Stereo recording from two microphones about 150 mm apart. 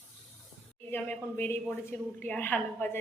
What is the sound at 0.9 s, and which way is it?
A woman's voice, 15° left (ahead or behind).